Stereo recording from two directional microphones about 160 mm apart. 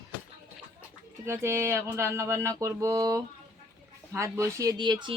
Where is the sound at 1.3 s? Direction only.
15° right (ahead or behind).